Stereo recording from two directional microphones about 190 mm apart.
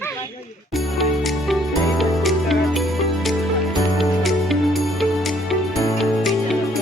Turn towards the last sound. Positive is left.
turn(degrees=0)  # may be behind; listen again after turning